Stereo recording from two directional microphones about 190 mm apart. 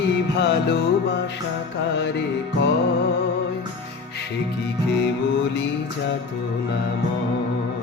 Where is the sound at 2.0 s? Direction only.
65° left (ahead or behind).